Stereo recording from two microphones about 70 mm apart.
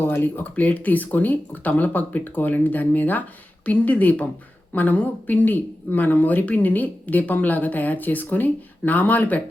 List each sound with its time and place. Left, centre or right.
0.0 s speech: left